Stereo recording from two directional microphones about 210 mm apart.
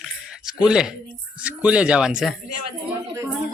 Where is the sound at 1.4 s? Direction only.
5° right (ahead or behind).